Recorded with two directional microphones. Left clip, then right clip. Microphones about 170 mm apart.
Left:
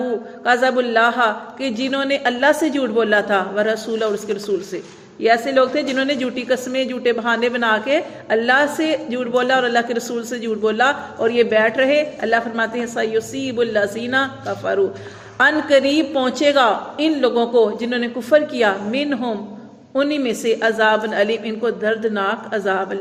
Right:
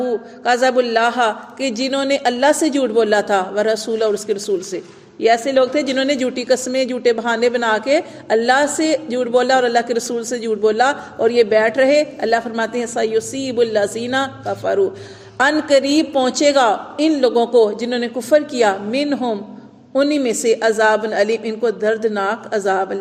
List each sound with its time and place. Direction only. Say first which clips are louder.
0.4 s a woman's voice: right 1 dB; 40° right (ahead or behind)